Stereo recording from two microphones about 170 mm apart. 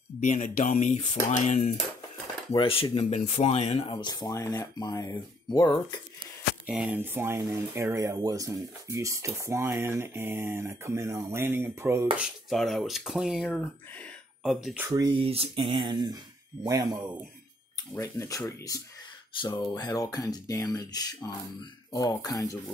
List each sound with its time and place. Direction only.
0.2 s speech: 50° left (ahead or behind); by 5.9 s 25° left (ahead or behind)
6.6 s speech: 5° right (ahead or behind)
12.2 s speech: centre (ahead or behind)
14.9 s speech: 20° right (ahead or behind)
15.1 s speech: 35° right (ahead or behind)
17.9 s speech: 20° left (ahead or behind)